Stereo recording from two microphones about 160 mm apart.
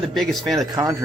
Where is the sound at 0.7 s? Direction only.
20° right (ahead or behind).